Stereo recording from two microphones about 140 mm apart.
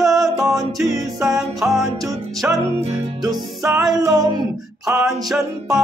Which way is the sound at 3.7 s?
5° right (ahead or behind).